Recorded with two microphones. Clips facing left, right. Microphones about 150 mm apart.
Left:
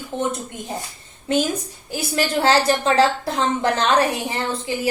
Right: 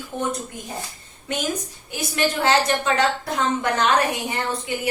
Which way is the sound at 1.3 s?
30° left (ahead or behind).